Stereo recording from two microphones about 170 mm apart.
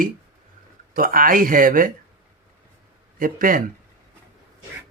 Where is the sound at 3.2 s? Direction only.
55° right (ahead or behind).